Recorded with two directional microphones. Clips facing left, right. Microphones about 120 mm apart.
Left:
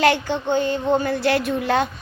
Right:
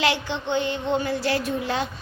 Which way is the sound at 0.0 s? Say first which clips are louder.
Left 6 dB; 50° left (ahead or behind).